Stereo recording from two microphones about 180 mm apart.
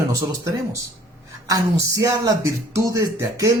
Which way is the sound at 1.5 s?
20° right (ahead or behind).